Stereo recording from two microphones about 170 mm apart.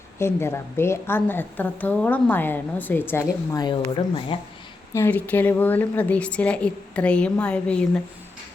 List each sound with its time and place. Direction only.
0.2 s a woman's voice: 15° left (ahead or behind); by 4.4 s 30° left (ahead or behind)
4.9 s a woman's voice: 10° left (ahead or behind)